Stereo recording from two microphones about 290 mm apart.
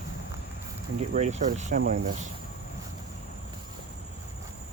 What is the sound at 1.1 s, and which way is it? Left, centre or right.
Speech, right.